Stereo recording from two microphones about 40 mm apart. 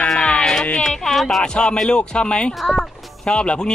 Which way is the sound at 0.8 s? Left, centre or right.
Centre.